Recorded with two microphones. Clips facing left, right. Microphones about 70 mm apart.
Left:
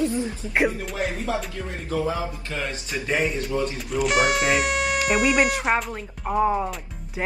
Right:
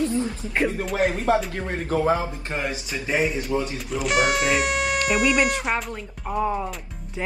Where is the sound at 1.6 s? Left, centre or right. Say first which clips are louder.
Right 3 dB; right.